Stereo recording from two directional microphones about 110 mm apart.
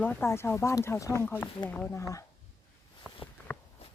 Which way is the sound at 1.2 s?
15° left (ahead or behind).